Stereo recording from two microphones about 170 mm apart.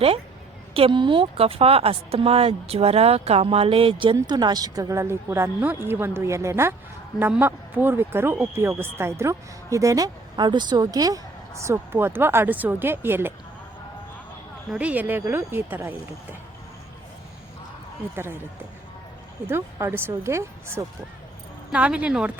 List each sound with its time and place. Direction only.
0.7 s speech: 30° right (ahead or behind); by 13.3 s 15° right (ahead or behind)
14.7 s speech: 10° right (ahead or behind)
18.1 s speech: 15° right (ahead or behind)
19.5 s speech: 15° right (ahead or behind)